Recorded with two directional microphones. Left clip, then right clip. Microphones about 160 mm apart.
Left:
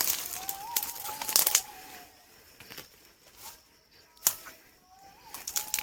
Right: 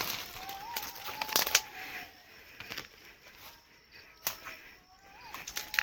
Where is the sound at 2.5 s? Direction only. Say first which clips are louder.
Right 5 dB; 25° right (ahead or behind).